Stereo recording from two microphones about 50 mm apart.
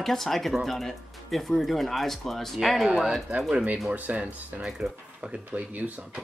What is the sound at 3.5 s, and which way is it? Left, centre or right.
Speech, right.